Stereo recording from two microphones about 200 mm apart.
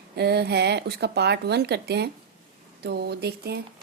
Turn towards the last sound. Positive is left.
turn(degrees=-55)  # may be behind; listen again after turning